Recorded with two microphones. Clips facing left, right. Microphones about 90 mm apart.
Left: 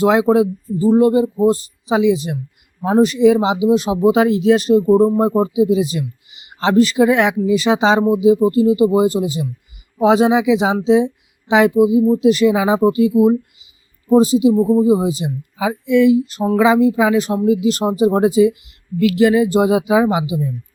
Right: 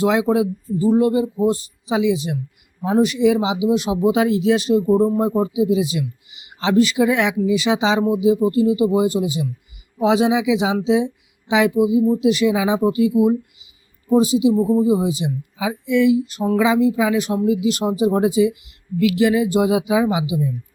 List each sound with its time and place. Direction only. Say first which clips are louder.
0.0 s speech: left 4 dB; 40° left (ahead or behind)